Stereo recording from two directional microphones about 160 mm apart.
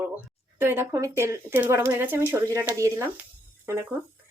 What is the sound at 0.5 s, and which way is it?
Speech, 15° right (ahead or behind).